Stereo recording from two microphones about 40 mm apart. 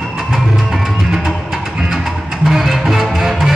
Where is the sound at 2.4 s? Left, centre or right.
Centre.